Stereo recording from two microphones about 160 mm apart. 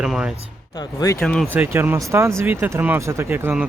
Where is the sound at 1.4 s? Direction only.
15° right (ahead or behind).